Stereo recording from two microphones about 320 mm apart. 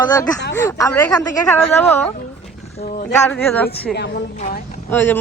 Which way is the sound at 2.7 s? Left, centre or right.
Left.